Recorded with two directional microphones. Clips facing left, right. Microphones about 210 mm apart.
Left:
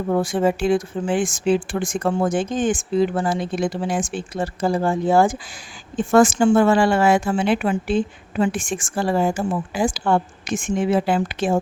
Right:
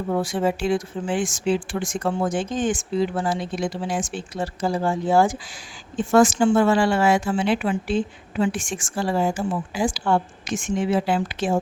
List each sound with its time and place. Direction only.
0.1 s a woman's voice: 50° left (ahead or behind)